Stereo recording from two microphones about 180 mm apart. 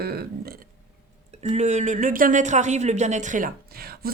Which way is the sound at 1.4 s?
40° right (ahead or behind).